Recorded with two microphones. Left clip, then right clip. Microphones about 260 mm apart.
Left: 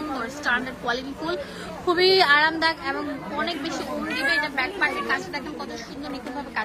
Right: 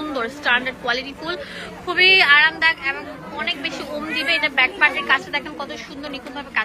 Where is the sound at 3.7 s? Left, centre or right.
Centre.